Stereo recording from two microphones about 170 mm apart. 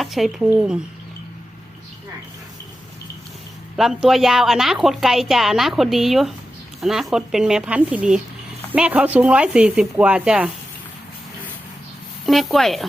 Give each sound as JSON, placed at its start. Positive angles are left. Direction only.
{"t": 0.0, "sound": "a woman's voice", "side_deg": 0}
{"t": 3.8, "sound": "a woman's voice", "side_deg": 0}
{"t": 12.2, "sound": "a woman's voice", "side_deg": 0}